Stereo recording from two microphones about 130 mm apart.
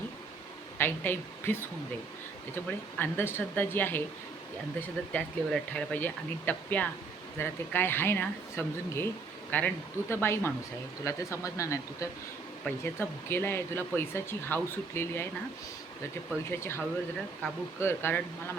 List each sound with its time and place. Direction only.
0.8 s speech: 15° left (ahead or behind)
3.0 s speech: 15° left (ahead or behind)
16.5 s speech: 20° left (ahead or behind)